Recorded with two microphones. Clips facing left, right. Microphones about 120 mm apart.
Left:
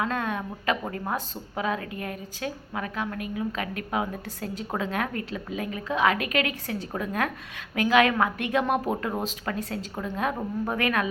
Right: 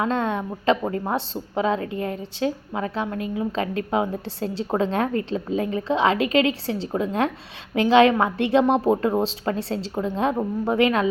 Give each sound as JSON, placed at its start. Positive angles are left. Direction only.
{"t": 0.0, "sound": "a woman's voice", "side_deg": -25}